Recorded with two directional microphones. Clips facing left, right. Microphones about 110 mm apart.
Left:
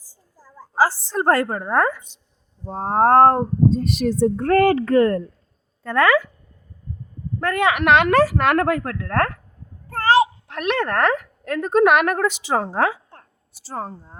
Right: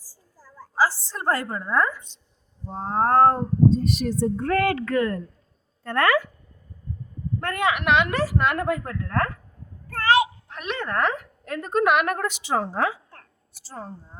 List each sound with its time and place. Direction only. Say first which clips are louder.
0.0 s a sound: left 1 dB; 20° left (ahead or behind)
0.8 s a woman's voice: left 4 dB; 50° left (ahead or behind); by 2.0 s 65° left (ahead or behind)
2.6 s speech: left 6 dB; 50° left (ahead or behind); by 4.5 s 75° left (ahead or behind)
4.5 s speech: left 8 dB; 35° left (ahead or behind)
7.6 s a woman's voice: left 5 dB; 90° left; by 9.4 s 70° left (ahead or behind)
9.9 s a sound: left 4 dB; 30° left (ahead or behind)
10.5 s a woman's voice: left 7 dB; 70° left (ahead or behind); by 14.2 s 90° left